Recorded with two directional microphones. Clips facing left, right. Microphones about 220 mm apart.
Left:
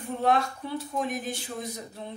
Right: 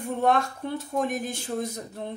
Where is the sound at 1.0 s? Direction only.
45° right (ahead or behind).